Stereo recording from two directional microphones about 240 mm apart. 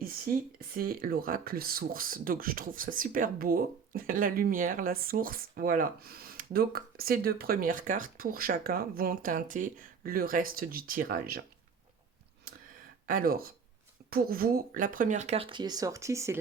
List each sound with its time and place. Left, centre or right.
0.0 s speech: right
13.1 s speech: right; by 16.4 s centre